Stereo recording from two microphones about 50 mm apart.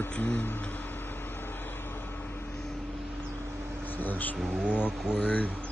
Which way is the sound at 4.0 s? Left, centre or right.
Left.